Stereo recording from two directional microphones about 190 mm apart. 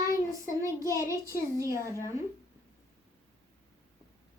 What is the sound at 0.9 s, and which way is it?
Speech, 15° right (ahead or behind).